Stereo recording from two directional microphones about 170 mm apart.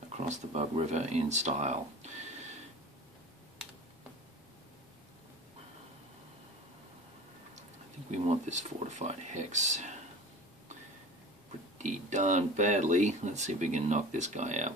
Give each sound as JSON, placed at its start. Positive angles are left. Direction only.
{"t": 0.3, "sound": "speech", "side_deg": -40}
{"t": 8.1, "sound": "speech", "side_deg": -45}
{"t": 11.8, "sound": "speech", "side_deg": -45}